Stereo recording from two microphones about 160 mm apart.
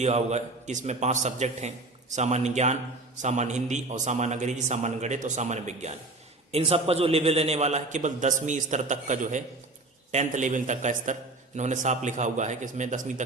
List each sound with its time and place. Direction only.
0.0 s a man's voice: 45° right (ahead or behind)